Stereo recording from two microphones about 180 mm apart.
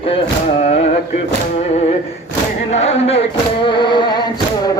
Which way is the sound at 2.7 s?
35° left (ahead or behind).